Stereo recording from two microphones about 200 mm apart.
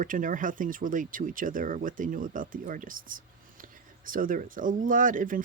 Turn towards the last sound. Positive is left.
turn(degrees=-40)  # may be behind; listen again after turning